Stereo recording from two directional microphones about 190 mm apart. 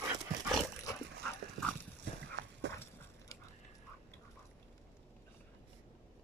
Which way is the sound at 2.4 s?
70° right (ahead or behind).